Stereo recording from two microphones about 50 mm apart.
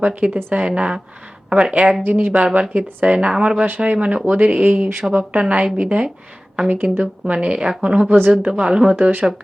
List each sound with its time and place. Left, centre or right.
0.0 s speech: right
2.0 s speech: right
2.4 s speech: right
4.9 s speech: centre
5.3 s speech: right
9.0 s speech: right